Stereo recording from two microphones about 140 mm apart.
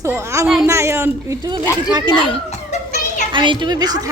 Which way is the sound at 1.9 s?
35° right (ahead or behind).